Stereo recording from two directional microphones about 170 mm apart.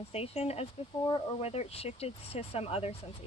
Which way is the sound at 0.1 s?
35° left (ahead or behind).